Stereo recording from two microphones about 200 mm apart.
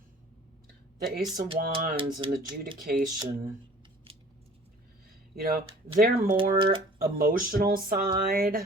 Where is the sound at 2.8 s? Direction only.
45° right (ahead or behind).